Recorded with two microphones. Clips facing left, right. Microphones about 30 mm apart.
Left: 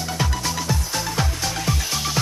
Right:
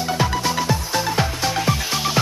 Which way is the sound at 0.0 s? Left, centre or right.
Centre.